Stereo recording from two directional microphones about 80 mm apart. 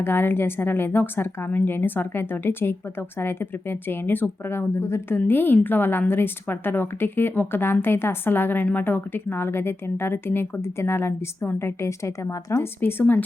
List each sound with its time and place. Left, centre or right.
0.0 s speech: left
12.8 s speech: left